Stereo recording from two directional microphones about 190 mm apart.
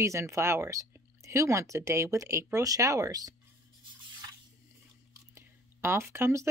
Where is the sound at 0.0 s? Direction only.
15° right (ahead or behind).